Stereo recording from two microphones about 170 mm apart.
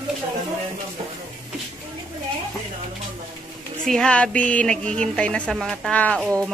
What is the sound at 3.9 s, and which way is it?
Speech, 5° left (ahead or behind).